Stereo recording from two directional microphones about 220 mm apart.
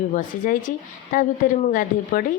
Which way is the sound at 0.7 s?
35° left (ahead or behind).